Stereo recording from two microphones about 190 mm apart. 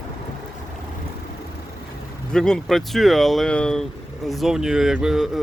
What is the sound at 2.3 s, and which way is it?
Speech, 5° left (ahead or behind).